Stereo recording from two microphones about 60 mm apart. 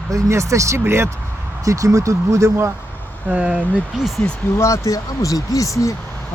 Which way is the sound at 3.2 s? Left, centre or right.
Centre.